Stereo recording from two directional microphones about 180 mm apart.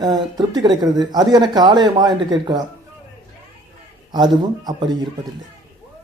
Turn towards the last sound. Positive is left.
turn(degrees=-20)  # may be behind; listen again after turning